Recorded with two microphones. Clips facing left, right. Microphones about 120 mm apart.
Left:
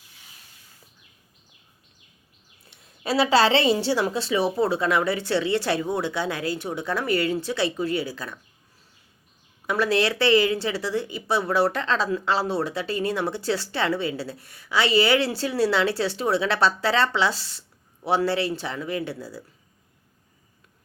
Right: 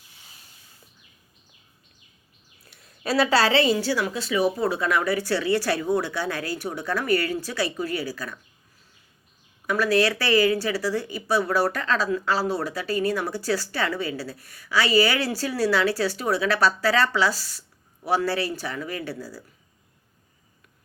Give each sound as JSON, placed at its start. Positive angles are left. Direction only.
{"t": 2.6, "sound": "speech", "side_deg": 20}
{"t": 9.6, "sound": "speech", "side_deg": 25}